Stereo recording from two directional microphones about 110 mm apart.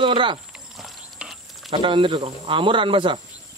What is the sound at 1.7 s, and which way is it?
Speech, 50° right (ahead or behind).